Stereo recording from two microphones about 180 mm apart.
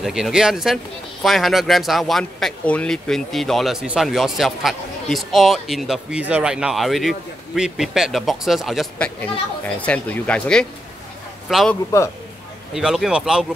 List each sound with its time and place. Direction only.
0.0 s a man's voice: centre (ahead or behind)
11.9 s speech: 15° left (ahead or behind)
12.7 s speech: centre (ahead or behind)